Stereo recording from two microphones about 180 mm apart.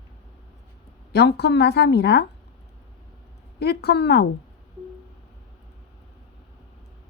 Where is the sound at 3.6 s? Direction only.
65° left (ahead or behind).